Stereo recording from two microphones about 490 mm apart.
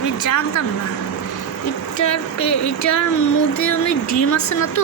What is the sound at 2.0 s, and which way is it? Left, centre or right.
Speech, left.